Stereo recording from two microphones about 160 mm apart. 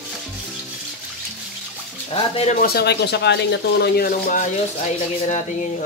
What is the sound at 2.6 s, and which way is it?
Speech, 85° left.